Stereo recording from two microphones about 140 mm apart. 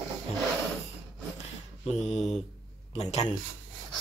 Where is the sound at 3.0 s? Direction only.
50° left (ahead or behind).